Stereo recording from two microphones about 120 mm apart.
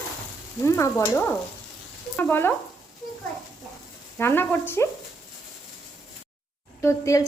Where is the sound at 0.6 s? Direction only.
25° left (ahead or behind).